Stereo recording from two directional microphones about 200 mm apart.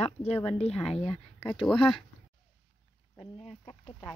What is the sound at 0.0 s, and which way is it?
Speech, 30° left (ahead or behind).